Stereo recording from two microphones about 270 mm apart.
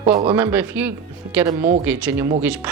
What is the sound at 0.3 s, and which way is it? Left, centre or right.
Speech, centre.